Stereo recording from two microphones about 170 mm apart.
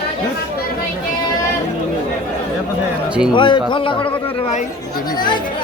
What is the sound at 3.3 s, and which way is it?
A man's voice, 30° left (ahead or behind).